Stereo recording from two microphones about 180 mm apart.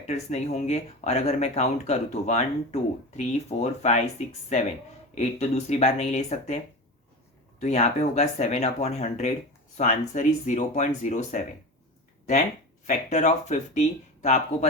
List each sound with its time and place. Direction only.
0.1 s speech: 40° left (ahead or behind)
7.6 s speech: 40° left (ahead or behind)
12.8 s speech: 40° left (ahead or behind)